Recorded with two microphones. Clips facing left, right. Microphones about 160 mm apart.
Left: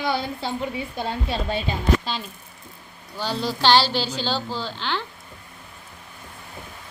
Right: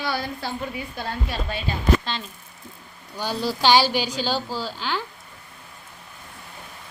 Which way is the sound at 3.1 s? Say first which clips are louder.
Even; 10° right (ahead or behind).